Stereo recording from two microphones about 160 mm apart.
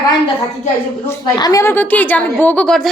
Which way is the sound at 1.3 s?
25° left (ahead or behind).